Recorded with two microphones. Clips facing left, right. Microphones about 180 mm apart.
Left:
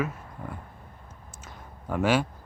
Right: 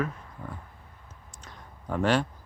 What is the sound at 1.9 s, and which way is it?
Speech, 5° left (ahead or behind).